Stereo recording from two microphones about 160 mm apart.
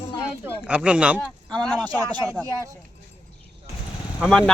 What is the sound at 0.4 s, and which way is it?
Speech, 5° right (ahead or behind).